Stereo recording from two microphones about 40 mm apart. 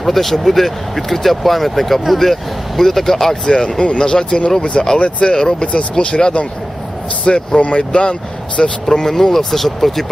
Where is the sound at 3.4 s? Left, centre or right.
Left.